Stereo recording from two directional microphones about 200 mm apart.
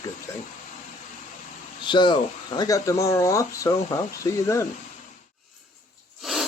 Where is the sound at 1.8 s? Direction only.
25° left (ahead or behind).